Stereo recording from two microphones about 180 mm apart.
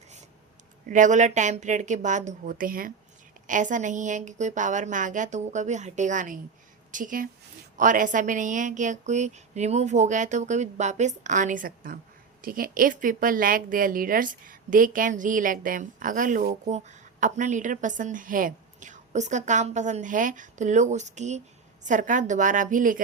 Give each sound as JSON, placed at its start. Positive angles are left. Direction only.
{"t": 0.9, "sound": "a woman's voice", "side_deg": -45}